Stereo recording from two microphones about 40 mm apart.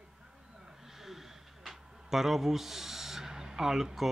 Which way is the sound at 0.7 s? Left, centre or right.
Centre.